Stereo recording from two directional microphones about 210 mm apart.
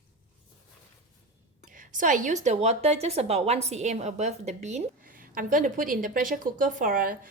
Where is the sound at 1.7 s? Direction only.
40° right (ahead or behind).